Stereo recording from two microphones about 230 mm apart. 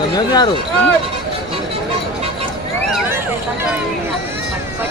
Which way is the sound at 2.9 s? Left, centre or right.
Centre.